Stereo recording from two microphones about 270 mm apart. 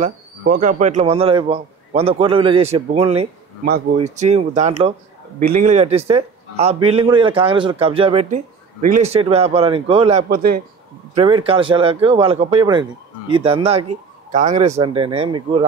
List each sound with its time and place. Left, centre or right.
0.4 s a man's voice: right